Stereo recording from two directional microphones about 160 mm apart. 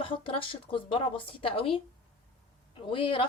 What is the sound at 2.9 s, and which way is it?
Speech, 35° left (ahead or behind).